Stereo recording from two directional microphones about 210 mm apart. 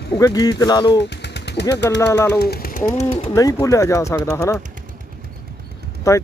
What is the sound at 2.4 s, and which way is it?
Speech, 45° left (ahead or behind).